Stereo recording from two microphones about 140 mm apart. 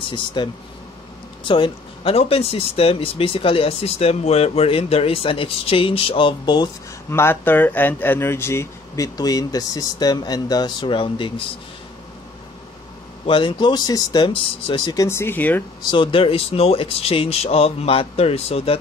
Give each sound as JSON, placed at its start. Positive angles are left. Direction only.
{"t": 0.1, "sound": "speech", "side_deg": 30}
{"t": 7.1, "sound": "speech", "side_deg": 15}
{"t": 13.3, "sound": "speech", "side_deg": 35}
{"t": 15.0, "sound": "speech", "side_deg": 15}
{"t": 15.9, "sound": "speech", "side_deg": 40}